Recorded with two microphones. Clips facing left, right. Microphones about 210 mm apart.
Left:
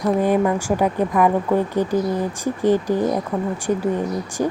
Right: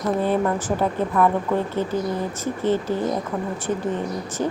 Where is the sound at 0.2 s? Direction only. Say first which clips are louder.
Left 3 dB; 10° left (ahead or behind).